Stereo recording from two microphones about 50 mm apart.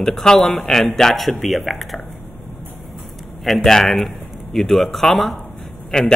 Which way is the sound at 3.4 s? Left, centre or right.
Centre.